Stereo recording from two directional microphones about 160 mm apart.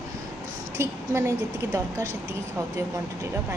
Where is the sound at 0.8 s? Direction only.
15° right (ahead or behind).